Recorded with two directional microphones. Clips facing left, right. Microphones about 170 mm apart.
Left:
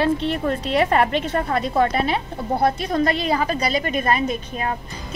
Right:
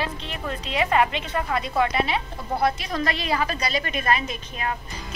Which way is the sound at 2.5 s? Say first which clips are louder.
Left 4 dB; 30° left (ahead or behind).